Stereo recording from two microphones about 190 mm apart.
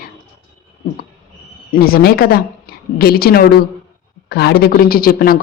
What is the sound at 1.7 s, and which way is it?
A woman's voice, 50° left (ahead or behind).